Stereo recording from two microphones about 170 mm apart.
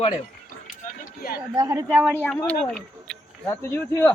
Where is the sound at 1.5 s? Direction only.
20° right (ahead or behind).